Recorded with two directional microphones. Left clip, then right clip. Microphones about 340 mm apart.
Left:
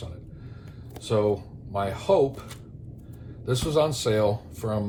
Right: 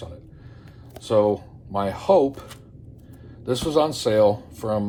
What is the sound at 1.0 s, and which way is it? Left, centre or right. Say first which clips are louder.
Speech: right 5 dB; right.